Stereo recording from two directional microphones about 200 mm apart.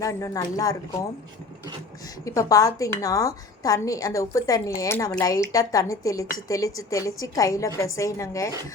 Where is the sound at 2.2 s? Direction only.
15° left (ahead or behind).